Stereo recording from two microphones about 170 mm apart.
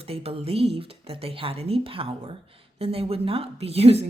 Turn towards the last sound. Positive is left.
turn(degrees=-40)  # may be behind; listen again after turning